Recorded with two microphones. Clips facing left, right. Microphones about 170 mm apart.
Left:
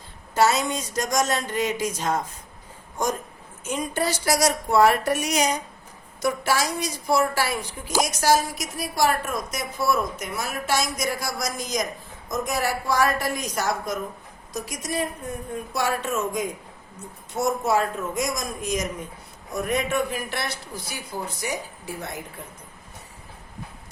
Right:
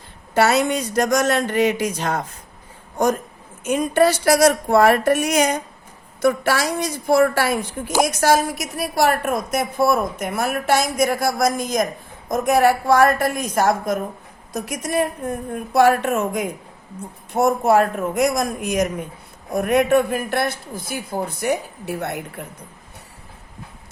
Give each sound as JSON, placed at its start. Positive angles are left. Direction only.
{"t": 0.3, "sound": "a woman's voice", "side_deg": -65}
{"t": 3.6, "sound": "a woman's voice", "side_deg": -65}